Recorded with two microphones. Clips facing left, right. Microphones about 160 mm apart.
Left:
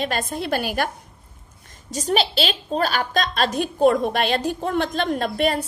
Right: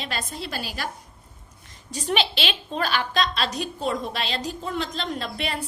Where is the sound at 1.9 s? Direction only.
40° left (ahead or behind).